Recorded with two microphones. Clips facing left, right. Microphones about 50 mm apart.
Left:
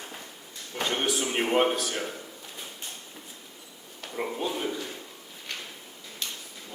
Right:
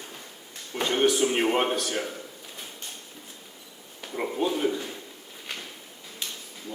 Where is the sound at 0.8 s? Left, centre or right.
Centre.